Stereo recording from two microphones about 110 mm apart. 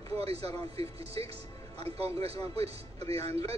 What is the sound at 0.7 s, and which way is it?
A man's voice, 65° right (ahead or behind).